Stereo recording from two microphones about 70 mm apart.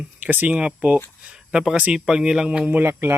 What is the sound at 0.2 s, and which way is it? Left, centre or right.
Speech, right.